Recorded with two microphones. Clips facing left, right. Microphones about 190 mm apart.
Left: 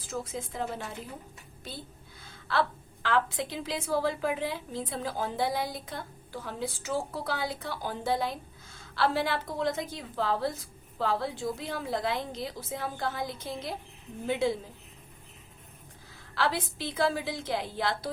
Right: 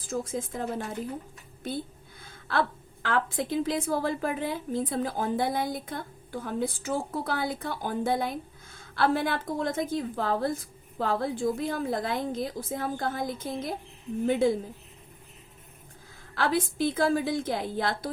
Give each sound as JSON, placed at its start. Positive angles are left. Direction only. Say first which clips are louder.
{"t": 0.0, "sound": "a woman's voice", "louder": "right 4 dB", "side_deg": -50}
{"t": 2.2, "sound": "a woman's voice", "louder": "right 1 dB", "side_deg": -50}
{"t": 16.3, "sound": "a woman's voice", "louder": "right 3 dB", "side_deg": -50}